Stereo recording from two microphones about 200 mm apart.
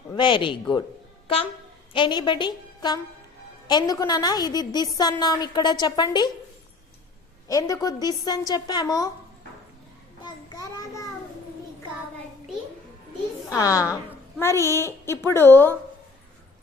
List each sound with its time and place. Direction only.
0.1 s a woman's voice: 25° left (ahead or behind)
1.9 s a woman's voice: 25° left (ahead or behind)
7.4 s a woman's voice: 15° left (ahead or behind)
10.2 s a child's voice: 20° left (ahead or behind)
13.6 s a woman's voice: 15° left (ahead or behind)